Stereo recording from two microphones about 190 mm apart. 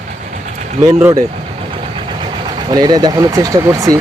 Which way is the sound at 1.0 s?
15° right (ahead or behind).